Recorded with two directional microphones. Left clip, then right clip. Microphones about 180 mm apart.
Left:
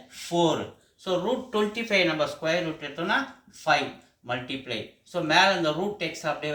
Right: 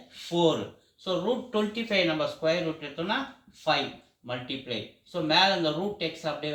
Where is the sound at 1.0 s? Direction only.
15° left (ahead or behind).